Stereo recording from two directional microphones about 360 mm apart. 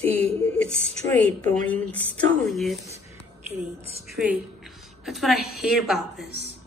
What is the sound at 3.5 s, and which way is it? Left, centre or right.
Speech, centre.